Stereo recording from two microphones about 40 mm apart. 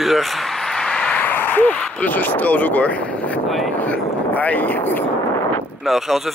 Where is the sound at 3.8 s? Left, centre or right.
Left.